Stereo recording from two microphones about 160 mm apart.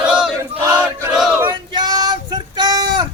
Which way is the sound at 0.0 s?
5° right (ahead or behind).